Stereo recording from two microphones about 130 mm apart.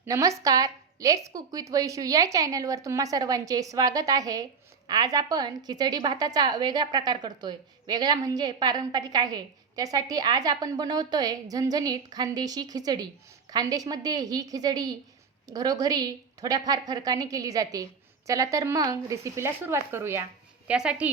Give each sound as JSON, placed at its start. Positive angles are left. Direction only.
{"t": 0.0, "sound": "a woman's voice", "side_deg": -25}
{"t": 20.7, "sound": "speech", "side_deg": -10}